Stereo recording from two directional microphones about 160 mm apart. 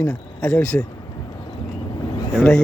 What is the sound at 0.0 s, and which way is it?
Speech, 10° left (ahead or behind).